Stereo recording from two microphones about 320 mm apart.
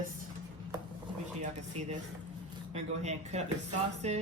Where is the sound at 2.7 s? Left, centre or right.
Right.